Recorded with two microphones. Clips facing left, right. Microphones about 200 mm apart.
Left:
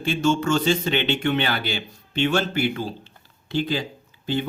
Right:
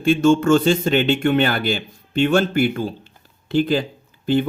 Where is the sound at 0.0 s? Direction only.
50° right (ahead or behind).